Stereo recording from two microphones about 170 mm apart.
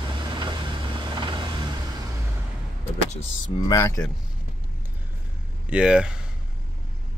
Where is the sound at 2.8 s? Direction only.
40° left (ahead or behind).